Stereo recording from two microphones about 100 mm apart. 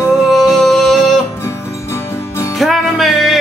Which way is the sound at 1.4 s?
30° left (ahead or behind).